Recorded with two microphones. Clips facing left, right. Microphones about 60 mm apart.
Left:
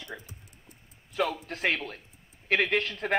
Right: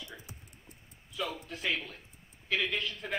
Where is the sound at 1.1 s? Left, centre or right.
Left.